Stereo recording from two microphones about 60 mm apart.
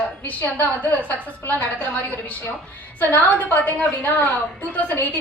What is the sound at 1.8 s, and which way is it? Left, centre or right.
A woman's voice, left.